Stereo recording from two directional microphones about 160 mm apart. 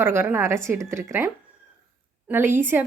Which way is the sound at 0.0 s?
15° right (ahead or behind).